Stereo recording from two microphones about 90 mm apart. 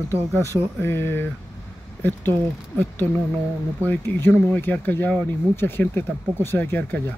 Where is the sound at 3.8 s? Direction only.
25° left (ahead or behind).